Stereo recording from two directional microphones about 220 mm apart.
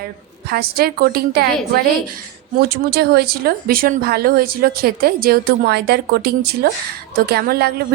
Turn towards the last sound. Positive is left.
turn(degrees=-45)  # may be behind; listen again after turning